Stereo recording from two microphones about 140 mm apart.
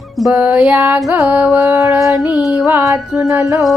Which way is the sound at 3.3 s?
20° right (ahead or behind).